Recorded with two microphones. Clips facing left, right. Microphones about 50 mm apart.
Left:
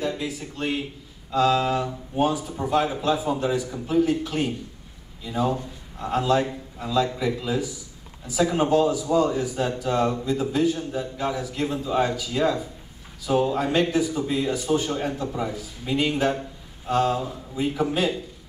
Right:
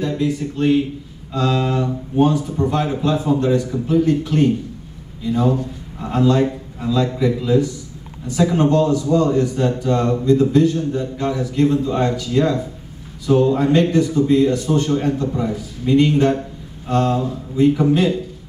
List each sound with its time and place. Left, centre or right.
0.0 s a man's voice: centre